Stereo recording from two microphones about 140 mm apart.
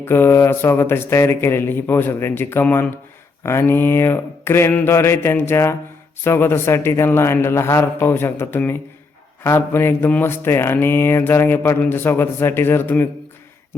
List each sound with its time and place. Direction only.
0.0 s speech: 15° left (ahead or behind)